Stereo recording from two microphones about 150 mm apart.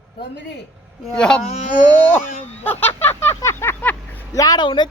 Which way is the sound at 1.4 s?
50° left (ahead or behind).